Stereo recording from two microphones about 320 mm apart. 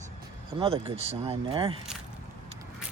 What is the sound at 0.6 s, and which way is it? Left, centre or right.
Speech, centre.